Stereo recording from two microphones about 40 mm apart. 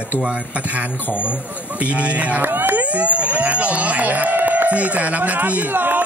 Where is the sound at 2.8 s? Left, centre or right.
Right.